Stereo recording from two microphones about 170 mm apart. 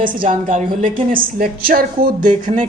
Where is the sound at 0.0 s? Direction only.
55° right (ahead or behind).